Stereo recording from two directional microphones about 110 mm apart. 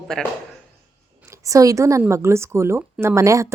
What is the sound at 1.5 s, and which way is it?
Speech, 30° right (ahead or behind).